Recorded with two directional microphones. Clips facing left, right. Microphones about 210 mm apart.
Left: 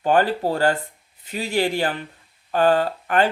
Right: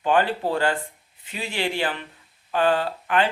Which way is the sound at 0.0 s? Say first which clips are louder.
Left 2 dB; 40° left (ahead or behind).